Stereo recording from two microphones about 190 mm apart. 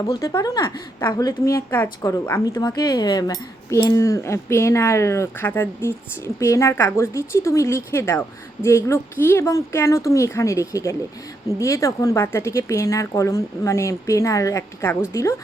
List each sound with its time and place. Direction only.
0.0 s a woman's voice: 15° left (ahead or behind)